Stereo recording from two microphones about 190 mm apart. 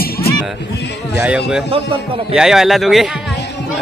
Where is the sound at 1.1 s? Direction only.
5° right (ahead or behind).